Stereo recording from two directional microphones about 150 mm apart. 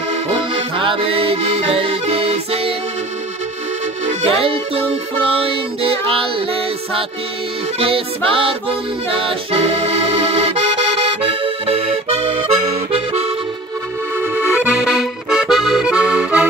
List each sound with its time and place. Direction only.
0.3 s music: 35° right (ahead or behind)
4.2 s music: 40° right (ahead or behind)
12.9 s accordion: 40° right (ahead or behind)
14.2 s accordion: 10° right (ahead or behind)